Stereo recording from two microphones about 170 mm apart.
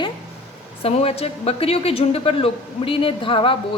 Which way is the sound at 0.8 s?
35° left (ahead or behind).